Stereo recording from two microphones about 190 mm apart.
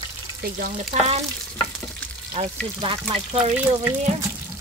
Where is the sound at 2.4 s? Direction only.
35° right (ahead or behind).